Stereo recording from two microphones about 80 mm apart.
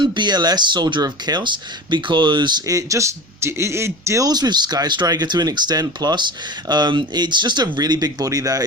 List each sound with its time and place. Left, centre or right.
0.0 s speech: right
1.0 s speech: right
2.6 s speech: right
4.3 s speech: right